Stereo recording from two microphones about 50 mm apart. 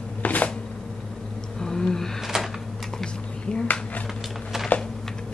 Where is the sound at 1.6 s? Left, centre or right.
Centre.